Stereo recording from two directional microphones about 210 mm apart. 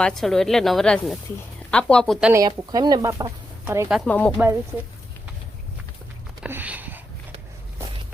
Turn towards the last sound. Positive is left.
turn(degrees=-10)  # may be behind; listen again after turning